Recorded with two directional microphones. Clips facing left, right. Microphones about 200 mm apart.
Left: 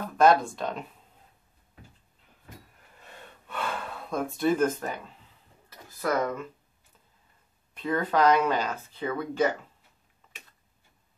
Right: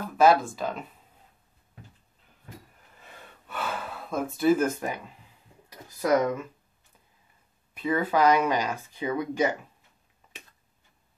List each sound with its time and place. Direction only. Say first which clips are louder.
0.2 s speech: right 1 dB; 5° right (ahead or behind)
3.0 s gasp: left 1 dB; 5° right (ahead or behind)
5.7 s a sound: right 5 dB; 15° right (ahead or behind)
7.7 s speech: right 1 dB; 5° right (ahead or behind)